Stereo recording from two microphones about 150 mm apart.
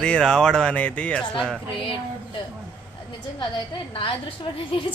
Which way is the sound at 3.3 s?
30° left (ahead or behind).